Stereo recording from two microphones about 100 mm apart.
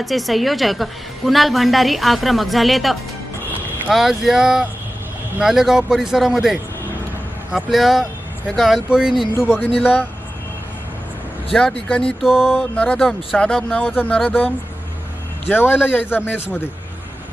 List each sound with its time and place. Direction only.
0.0 s a woman's voice: centre (ahead or behind)
9.8 s speech: 20° left (ahead or behind)
11.9 s speech: 10° left (ahead or behind)
12.2 s a woman's voice: 5° right (ahead or behind)
12.5 s speech: 15° left (ahead or behind)